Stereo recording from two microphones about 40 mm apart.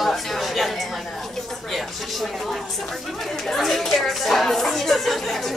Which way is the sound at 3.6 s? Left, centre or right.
Centre.